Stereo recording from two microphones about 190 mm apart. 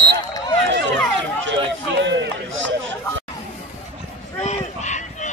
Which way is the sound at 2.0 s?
70° right (ahead or behind).